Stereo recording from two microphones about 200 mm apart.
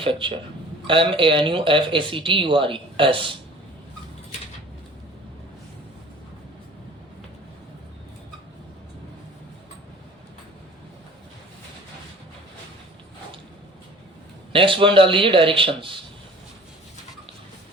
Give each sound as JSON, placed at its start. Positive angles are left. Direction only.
{"t": 0.0, "sound": "speech", "side_deg": -25}
{"t": 14.5, "sound": "speech", "side_deg": -25}